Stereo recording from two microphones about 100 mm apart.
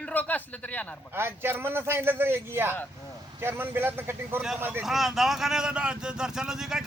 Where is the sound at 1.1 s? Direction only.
25° right (ahead or behind).